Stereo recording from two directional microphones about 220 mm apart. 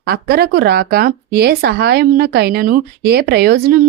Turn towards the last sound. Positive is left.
turn(degrees=-45)  # may be behind; listen again after turning